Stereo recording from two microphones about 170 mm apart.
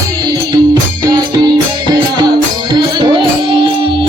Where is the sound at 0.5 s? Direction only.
25° right (ahead or behind).